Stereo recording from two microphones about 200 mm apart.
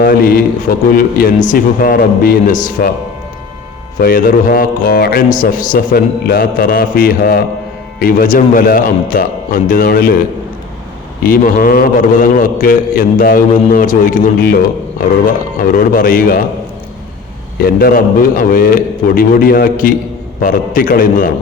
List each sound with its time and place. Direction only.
0.0 s a man's voice: 45° left (ahead or behind)
4.0 s a man's voice: 45° left (ahead or behind)
11.2 s a man's voice: 45° left (ahead or behind)
15.7 s a man's voice: 45° left (ahead or behind)
17.6 s a man's voice: 50° left (ahead or behind)